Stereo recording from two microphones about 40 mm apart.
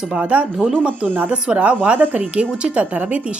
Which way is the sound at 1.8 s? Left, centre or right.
Right.